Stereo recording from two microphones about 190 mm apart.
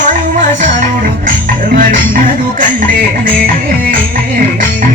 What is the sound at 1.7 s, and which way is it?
Music, 45° right (ahead or behind).